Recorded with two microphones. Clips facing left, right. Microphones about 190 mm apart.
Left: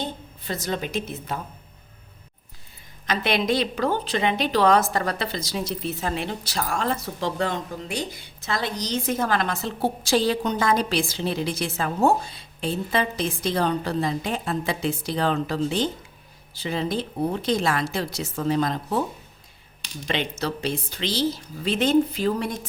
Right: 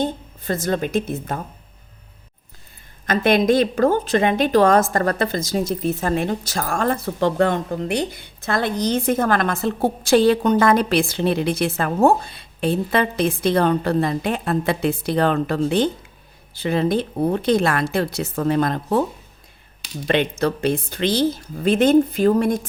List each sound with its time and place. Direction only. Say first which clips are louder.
0.0 s a woman's voice: right 8 dB; 50° right (ahead or behind)
3.1 s a woman's voice: right 7 dB; 50° right (ahead or behind)
20.1 s a woman's voice: right 7 dB; 55° right (ahead or behind)